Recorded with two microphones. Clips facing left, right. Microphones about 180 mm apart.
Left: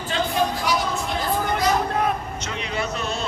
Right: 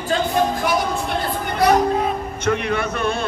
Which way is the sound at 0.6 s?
55° right (ahead or behind).